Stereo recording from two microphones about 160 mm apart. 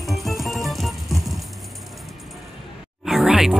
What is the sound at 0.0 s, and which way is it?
Music, centre (ahead or behind).